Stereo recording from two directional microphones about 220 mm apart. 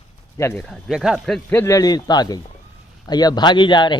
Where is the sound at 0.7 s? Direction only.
Centre (ahead or behind).